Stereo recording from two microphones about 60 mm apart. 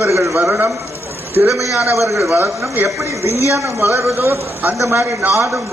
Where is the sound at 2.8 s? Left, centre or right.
Right.